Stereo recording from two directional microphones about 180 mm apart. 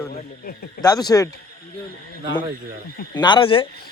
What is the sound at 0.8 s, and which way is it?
Speech, 20° left (ahead or behind).